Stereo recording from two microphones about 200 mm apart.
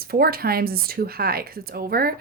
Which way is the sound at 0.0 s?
50° right (ahead or behind).